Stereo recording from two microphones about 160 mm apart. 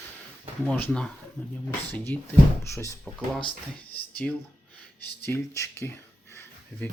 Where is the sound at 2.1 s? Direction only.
10° left (ahead or behind).